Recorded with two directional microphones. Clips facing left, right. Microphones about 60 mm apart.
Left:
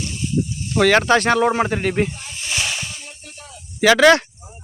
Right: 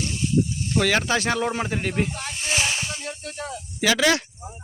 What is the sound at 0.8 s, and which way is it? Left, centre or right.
Speech, left.